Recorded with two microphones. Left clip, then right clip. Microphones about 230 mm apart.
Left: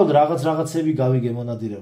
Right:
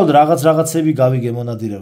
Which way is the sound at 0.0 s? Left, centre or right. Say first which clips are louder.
Right 6 dB; right.